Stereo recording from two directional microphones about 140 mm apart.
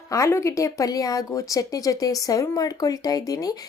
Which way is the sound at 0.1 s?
20° left (ahead or behind).